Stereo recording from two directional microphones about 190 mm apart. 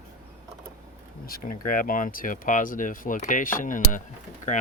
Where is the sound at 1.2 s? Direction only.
50° left (ahead or behind).